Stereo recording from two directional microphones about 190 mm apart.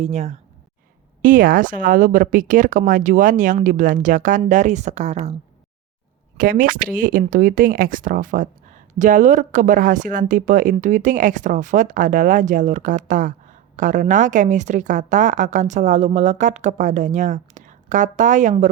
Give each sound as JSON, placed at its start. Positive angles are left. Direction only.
{"t": 0.0, "sound": "a woman's voice", "side_deg": -35}
{"t": 6.3, "sound": "a woman's voice", "side_deg": -45}